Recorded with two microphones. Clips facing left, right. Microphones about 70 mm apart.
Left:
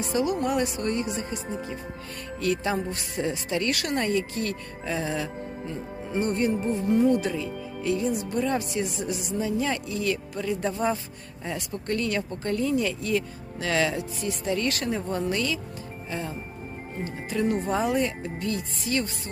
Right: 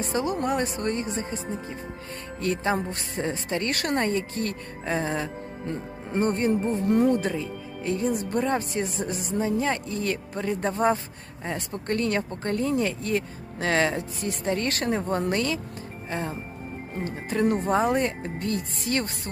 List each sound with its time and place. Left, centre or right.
0.0 s speech: right
2.4 s speech: right
6.8 s speech: right
16.0 s music: right
17.3 s speech: right